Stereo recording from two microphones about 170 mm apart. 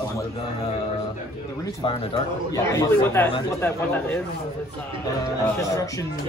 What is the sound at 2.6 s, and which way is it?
Speech, 15° left (ahead or behind).